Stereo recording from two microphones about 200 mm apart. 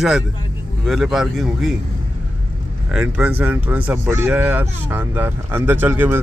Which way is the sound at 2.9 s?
5° right (ahead or behind).